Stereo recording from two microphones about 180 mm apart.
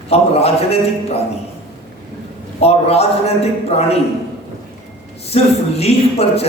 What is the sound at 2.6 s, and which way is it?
A man's voice, 35° left (ahead or behind).